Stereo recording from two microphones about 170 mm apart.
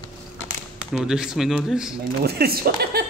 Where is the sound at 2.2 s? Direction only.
65° right (ahead or behind).